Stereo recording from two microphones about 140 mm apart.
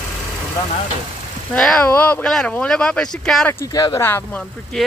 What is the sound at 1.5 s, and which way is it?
Speech, 5° left (ahead or behind).